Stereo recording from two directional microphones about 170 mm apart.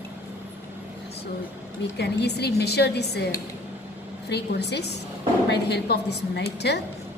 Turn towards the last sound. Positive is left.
turn(degrees=80)